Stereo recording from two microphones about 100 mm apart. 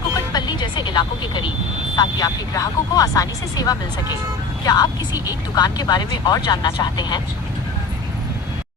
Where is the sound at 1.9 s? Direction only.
40° left (ahead or behind).